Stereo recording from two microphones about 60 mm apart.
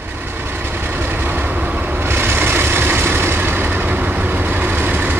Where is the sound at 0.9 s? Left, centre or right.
Right.